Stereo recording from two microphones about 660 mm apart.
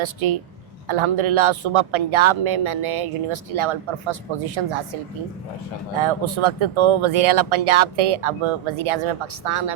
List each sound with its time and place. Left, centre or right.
0.0 s a woman's voice: right
6.0 s speech: right